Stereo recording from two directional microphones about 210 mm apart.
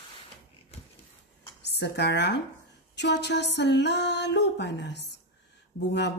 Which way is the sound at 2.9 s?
55° left (ahead or behind).